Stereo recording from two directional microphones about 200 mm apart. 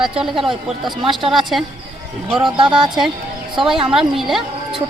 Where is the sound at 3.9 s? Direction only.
Centre (ahead or behind).